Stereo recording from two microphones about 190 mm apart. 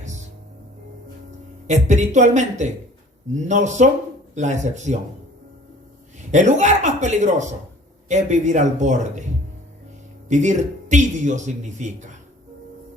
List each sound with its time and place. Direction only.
0.0 s music: 40° right (ahead or behind)
1.6 s a man's voice: 40° right (ahead or behind)
6.1 s a man's voice: 40° right (ahead or behind)
10.2 s a man's voice: 40° right (ahead or behind)